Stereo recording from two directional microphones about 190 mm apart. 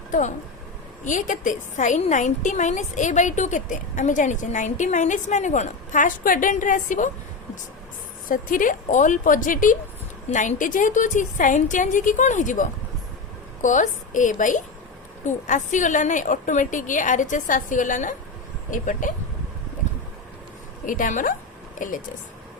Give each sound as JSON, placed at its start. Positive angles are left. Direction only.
{"t": 0.1, "sound": "a woman's voice", "side_deg": 40}
{"t": 8.3, "sound": "a woman's voice", "side_deg": 45}
{"t": 20.8, "sound": "a woman's voice", "side_deg": 45}